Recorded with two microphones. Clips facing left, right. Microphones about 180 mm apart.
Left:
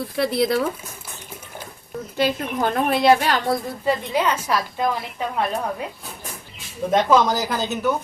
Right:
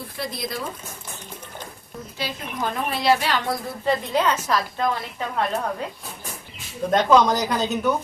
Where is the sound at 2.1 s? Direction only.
55° left (ahead or behind).